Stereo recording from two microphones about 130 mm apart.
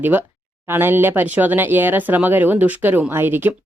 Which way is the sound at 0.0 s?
15° right (ahead or behind).